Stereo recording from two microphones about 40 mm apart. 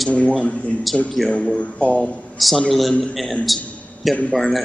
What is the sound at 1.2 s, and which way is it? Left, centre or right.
Speech, centre.